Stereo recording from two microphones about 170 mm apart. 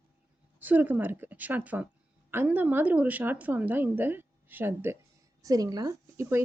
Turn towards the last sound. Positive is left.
turn(degrees=-20)  # may be behind; listen again after turning